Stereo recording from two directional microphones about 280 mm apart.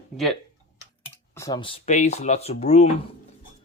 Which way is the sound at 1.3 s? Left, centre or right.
Centre.